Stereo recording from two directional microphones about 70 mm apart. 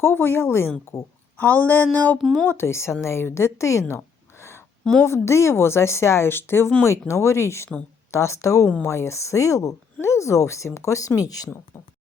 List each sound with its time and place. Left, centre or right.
0.0 s speech: left
1.4 s speech: left
2.5 s a woman's voice: left
4.8 s a woman's voice: centre
5.0 s speech: left